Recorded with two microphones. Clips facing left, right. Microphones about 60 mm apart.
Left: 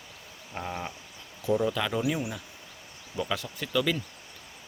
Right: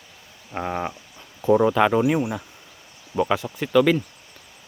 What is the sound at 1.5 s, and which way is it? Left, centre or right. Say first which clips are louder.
Speech: right 10 dB; right.